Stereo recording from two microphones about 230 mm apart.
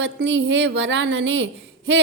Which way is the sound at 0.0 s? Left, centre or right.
Right.